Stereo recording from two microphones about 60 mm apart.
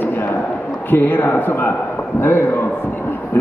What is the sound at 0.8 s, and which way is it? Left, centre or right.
A man's voice, left.